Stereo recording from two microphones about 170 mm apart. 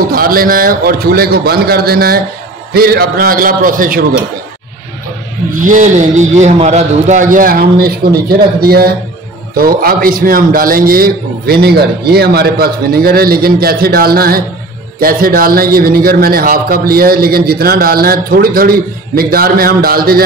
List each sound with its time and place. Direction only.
0.1 s a man's voice: 60° right (ahead or behind)
5.6 s a man's voice: 50° right (ahead or behind)